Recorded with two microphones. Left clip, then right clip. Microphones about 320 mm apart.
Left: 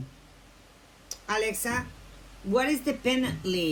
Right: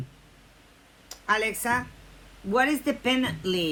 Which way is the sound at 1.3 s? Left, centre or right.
Right.